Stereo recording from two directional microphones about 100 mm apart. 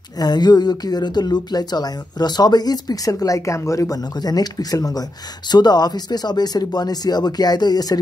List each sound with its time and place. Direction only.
0.2 s a woman's voice: 45° left (ahead or behind)